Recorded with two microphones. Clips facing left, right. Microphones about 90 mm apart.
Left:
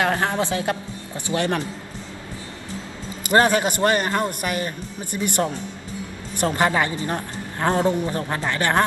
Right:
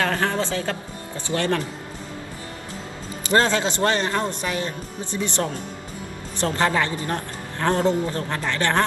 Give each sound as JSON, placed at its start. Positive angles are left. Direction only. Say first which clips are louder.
{"t": 0.0, "sound": "speech", "louder": "left 1 dB", "side_deg": 20}
{"t": 3.3, "sound": "a man's voice", "louder": "left 2 dB", "side_deg": 15}